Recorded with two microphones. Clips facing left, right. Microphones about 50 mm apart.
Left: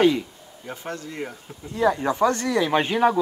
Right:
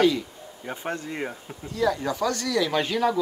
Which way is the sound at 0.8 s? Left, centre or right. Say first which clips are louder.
Right 2 dB; right.